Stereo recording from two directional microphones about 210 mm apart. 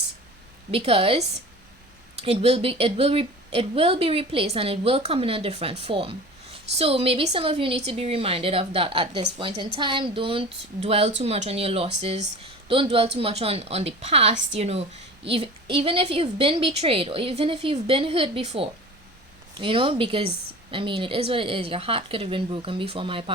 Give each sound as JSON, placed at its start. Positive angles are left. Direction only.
{"t": 0.7, "sound": "a woman's voice", "side_deg": -25}